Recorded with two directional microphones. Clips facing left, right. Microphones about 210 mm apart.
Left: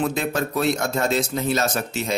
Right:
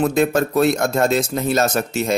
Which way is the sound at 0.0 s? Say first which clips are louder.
Right 6 dB; 45° right (ahead or behind).